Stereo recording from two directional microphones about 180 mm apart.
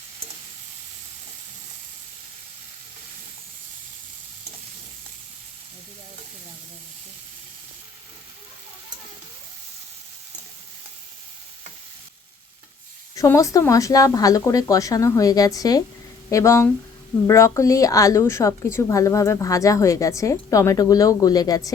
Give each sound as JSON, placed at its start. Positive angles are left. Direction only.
{"t": 13.1, "sound": "a woman's voice", "side_deg": 15}